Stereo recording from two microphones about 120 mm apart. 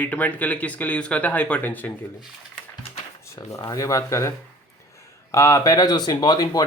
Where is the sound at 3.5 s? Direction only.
30° left (ahead or behind).